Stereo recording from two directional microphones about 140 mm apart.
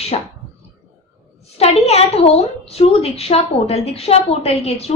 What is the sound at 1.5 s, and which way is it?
A woman's voice, 45° left (ahead or behind).